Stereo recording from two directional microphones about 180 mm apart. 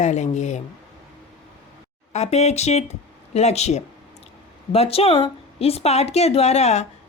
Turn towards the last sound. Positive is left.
turn(degrees=35)  # may be behind; listen again after turning